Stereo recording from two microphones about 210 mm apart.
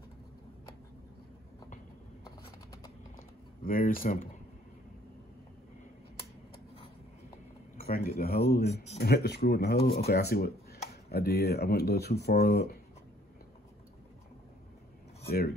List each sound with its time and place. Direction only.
2.2 s a sound: 15° left (ahead or behind)
3.6 s speech: 45° left (ahead or behind)
7.8 s speech: 45° left (ahead or behind)
15.2 s speech: 50° left (ahead or behind)